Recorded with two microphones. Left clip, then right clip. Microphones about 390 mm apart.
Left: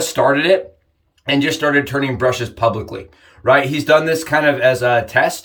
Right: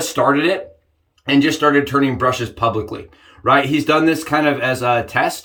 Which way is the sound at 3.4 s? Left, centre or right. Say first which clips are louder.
Left 1 dB; centre.